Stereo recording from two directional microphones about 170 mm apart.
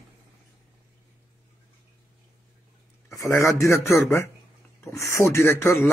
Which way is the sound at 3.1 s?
15° left (ahead or behind).